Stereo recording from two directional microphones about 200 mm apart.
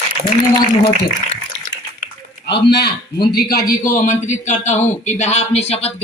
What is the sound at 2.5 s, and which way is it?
A man's voice, 55° left (ahead or behind).